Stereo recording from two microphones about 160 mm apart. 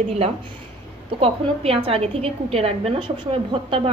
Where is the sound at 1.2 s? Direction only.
35° right (ahead or behind).